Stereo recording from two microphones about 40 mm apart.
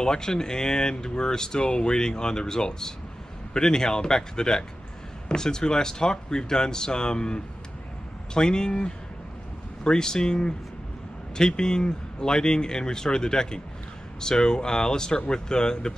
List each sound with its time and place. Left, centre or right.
0.0 s speech: centre